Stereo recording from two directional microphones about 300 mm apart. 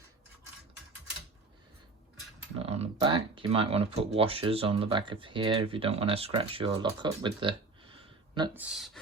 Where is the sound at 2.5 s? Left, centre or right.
Centre.